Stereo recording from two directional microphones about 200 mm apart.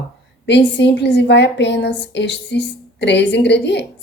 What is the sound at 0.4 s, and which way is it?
A woman's voice, 60° left (ahead or behind).